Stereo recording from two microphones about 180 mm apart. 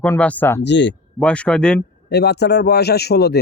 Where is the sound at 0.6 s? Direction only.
75° left (ahead or behind).